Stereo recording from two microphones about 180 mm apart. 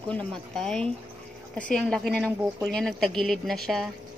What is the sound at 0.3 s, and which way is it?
A woman's voice, 5° left (ahead or behind).